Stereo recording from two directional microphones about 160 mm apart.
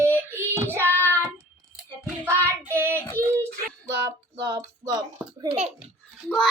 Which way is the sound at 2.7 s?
15° right (ahead or behind).